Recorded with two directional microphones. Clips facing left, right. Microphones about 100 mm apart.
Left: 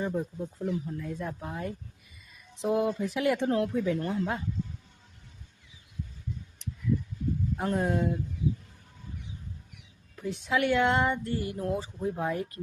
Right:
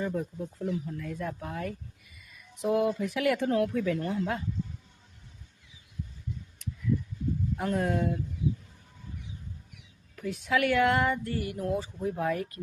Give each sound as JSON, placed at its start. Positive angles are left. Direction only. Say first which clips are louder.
{"t": 0.0, "sound": "speech", "louder": "left 1 dB", "side_deg": 25}
{"t": 7.5, "sound": "speech", "louder": "even", "side_deg": 25}
{"t": 10.2, "sound": "speech", "louder": "even", "side_deg": 25}